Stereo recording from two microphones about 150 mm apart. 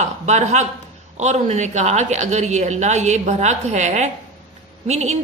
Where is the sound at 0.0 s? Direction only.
50° right (ahead or behind).